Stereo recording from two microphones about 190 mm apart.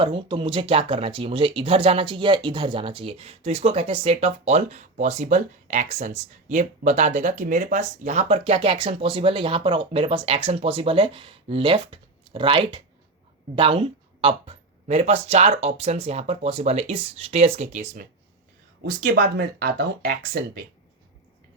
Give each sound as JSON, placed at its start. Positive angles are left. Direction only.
{"t": 0.0, "sound": "speech", "side_deg": -25}
{"t": 18.9, "sound": "speech", "side_deg": -50}